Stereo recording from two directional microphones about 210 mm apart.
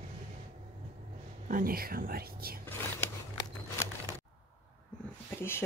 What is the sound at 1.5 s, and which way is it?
Speech, 40° right (ahead or behind).